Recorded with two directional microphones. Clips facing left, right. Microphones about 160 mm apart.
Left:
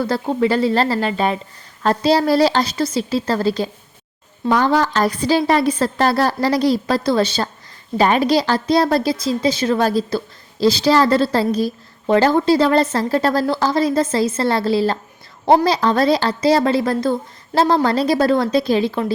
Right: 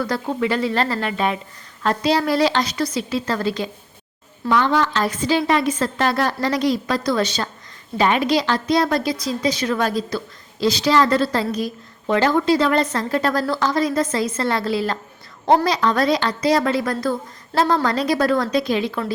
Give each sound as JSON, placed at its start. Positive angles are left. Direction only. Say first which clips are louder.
{"t": 0.0, "sound": "a woman's voice", "louder": "left 4 dB", "side_deg": 30}